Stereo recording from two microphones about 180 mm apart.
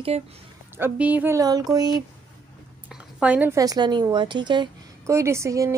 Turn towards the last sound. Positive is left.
turn(degrees=-15)  # may be behind; listen again after turning